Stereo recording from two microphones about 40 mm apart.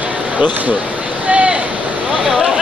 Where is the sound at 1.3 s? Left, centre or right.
Right.